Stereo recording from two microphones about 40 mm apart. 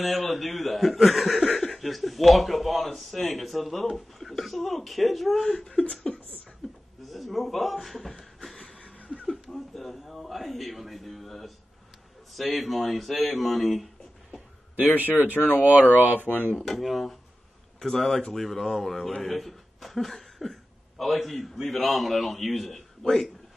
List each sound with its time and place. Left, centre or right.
0.0 s speech: centre
5.8 s a sound: left
6.6 s a sound: centre
9.3 s speech: centre
15.3 s speech: left
16.2 s speech: right
16.5 s speech: centre